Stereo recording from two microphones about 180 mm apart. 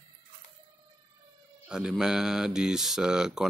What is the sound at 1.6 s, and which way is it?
Speech, 5° right (ahead or behind).